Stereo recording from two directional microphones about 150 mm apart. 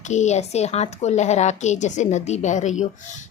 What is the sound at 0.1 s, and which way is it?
A woman's voice, 50° left (ahead or behind).